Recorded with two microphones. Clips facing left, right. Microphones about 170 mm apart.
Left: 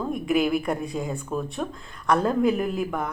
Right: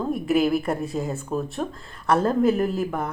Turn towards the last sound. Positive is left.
turn(degrees=-5)  # may be behind; listen again after turning